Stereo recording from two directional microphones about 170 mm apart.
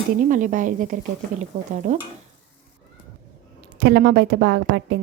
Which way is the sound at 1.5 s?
35° right (ahead or behind).